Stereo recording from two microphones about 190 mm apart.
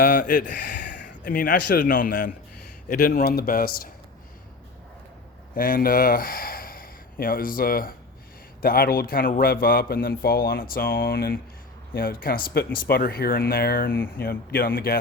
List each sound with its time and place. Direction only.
0.0 s a man's voice: 45° left (ahead or behind)
5.5 s a man's voice: 45° left (ahead or behind)